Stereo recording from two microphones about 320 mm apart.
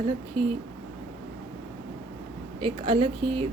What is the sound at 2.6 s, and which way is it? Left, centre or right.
Speech, centre.